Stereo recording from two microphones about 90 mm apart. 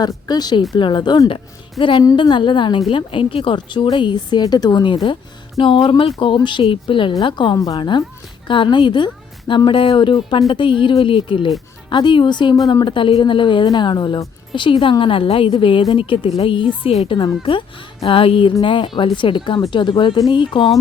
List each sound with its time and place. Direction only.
0.3 s speech: 50° left (ahead or behind)
0.8 s a woman's voice: 60° left (ahead or behind)
1.8 s a woman's voice: 65° left (ahead or behind)
2.9 s a woman's voice: 75° left (ahead or behind)
3.9 s a woman's voice: 60° left (ahead or behind); by 11.5 s 75° left (ahead or behind)
11.9 s a woman's voice: 65° left (ahead or behind)
13.7 s a woman's voice: 55° left (ahead or behind); by 17.2 s 70° left (ahead or behind)
18.0 s music: 90° left
18.6 s a woman's voice: 65° left (ahead or behind)